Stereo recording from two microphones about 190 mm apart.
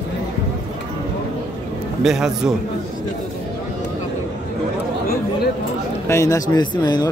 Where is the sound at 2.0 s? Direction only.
5° right (ahead or behind).